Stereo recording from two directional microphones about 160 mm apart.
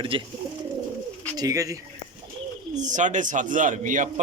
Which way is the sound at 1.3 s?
20° right (ahead or behind).